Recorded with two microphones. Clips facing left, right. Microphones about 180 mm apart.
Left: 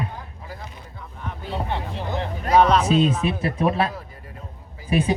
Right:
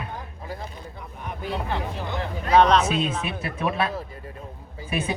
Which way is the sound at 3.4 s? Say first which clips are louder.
Left 3 dB; 35° left (ahead or behind).